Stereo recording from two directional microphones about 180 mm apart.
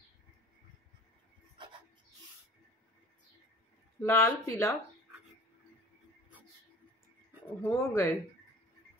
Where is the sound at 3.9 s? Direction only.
15° left (ahead or behind).